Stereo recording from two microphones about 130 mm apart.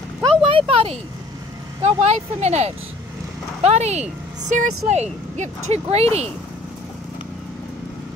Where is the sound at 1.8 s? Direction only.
60° right (ahead or behind).